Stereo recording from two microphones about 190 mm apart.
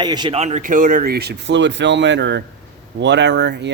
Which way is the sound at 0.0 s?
25° right (ahead or behind).